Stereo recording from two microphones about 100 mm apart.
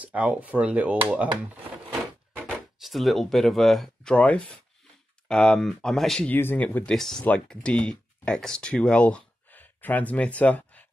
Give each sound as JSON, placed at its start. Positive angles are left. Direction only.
{"t": 0.0, "sound": "speech", "side_deg": -15}
{"t": 2.8, "sound": "speech", "side_deg": 0}
{"t": 6.2, "sound": "speech", "side_deg": 20}
{"t": 7.0, "sound": "speech", "side_deg": 5}